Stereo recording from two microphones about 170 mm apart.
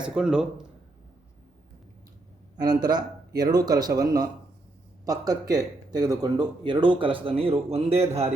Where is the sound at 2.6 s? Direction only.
25° right (ahead or behind).